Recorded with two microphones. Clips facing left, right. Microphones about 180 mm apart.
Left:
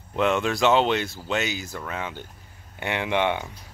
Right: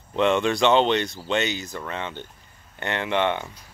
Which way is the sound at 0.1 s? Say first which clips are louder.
Right 2 dB; 5° left (ahead or behind).